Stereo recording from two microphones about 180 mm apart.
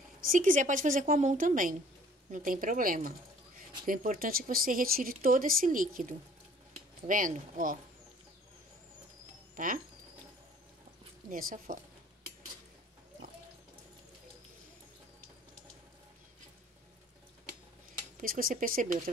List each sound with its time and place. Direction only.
0.2 s a woman's voice: 50° right (ahead or behind)
9.6 s speech: 45° right (ahead or behind)
11.2 s speech: 50° right (ahead or behind)
18.2 s speech: 50° right (ahead or behind)